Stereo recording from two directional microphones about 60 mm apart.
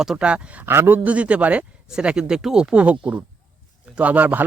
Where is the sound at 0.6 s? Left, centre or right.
Right.